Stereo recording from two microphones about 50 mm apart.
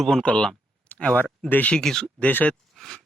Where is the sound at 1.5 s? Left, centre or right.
Left.